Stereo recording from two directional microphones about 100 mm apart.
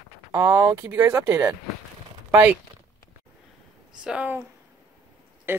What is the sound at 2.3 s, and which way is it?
Speech, 15° right (ahead or behind).